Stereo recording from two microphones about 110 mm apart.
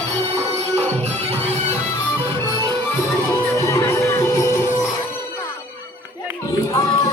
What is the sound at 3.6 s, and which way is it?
Music, 25° left (ahead or behind).